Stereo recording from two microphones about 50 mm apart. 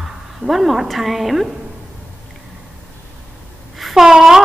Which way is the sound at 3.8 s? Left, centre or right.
Centre.